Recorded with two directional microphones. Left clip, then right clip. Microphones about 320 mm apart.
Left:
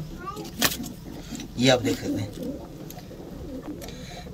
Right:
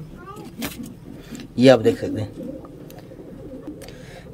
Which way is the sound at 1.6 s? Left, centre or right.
Centre.